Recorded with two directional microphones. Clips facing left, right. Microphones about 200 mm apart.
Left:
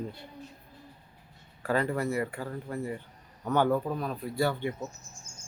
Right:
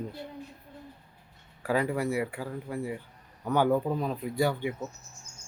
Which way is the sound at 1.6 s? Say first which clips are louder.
Right 1 dB; 10° right (ahead or behind).